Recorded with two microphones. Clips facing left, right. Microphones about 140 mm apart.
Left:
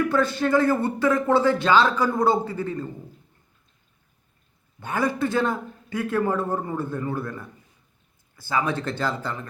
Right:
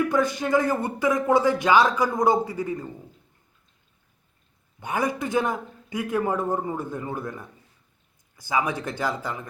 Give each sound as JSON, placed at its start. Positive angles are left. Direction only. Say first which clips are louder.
{"t": 0.0, "sound": "speech", "louder": "left 1 dB", "side_deg": -15}
{"t": 4.8, "sound": "speech", "louder": "left 2 dB", "side_deg": -15}